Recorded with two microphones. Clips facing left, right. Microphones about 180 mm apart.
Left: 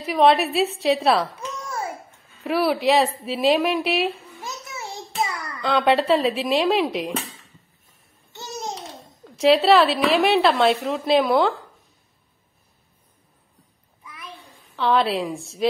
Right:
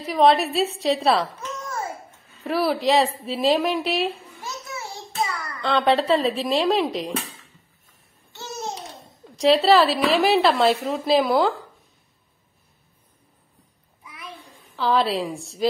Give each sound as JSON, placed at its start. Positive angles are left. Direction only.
{"t": 0.0, "sound": "a woman's voice", "side_deg": 0}
{"t": 2.4, "sound": "a woman's voice", "side_deg": 0}
{"t": 4.4, "sound": "a sound", "side_deg": 20}
{"t": 5.6, "sound": "a woman's voice", "side_deg": 0}
{"t": 8.3, "sound": "babbling", "side_deg": 15}
{"t": 9.4, "sound": "a woman's voice", "side_deg": 0}
{"t": 14.0, "sound": "a sound", "side_deg": -15}
{"t": 14.8, "sound": "a woman's voice", "side_deg": 0}